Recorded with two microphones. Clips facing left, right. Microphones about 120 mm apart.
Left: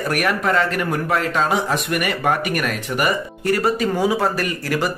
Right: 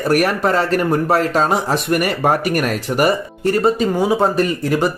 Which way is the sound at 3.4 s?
25° right (ahead or behind).